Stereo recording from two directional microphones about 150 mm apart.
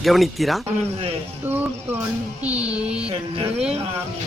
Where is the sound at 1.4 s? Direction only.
15° right (ahead or behind).